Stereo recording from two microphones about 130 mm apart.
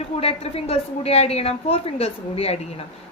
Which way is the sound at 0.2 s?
50° left (ahead or behind).